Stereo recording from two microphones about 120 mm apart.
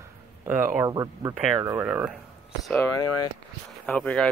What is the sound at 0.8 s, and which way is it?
Speech, 30° right (ahead or behind).